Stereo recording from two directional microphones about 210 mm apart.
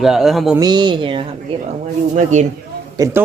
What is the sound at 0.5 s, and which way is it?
A woman's voice, 20° right (ahead or behind).